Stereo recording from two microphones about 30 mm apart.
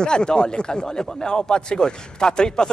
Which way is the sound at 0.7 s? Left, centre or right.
Centre.